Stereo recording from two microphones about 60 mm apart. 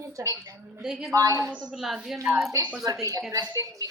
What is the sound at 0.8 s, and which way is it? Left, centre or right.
Speech, centre.